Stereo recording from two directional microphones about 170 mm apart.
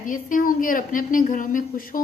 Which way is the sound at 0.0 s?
50° left (ahead or behind).